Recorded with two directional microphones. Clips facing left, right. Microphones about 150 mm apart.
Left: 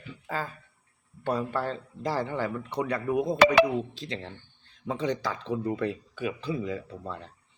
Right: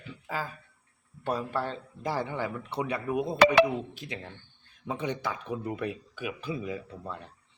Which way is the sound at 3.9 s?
15° right (ahead or behind).